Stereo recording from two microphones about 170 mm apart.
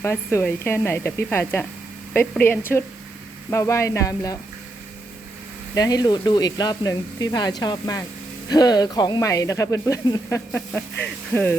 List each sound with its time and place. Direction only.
0.0 s speech: 15° left (ahead or behind)
5.7 s speech: 20° left (ahead or behind)